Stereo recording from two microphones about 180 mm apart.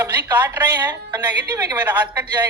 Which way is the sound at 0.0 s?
10° right (ahead or behind).